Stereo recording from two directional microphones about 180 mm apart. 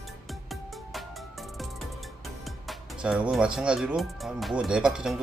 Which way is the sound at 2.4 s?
Centre (ahead or behind).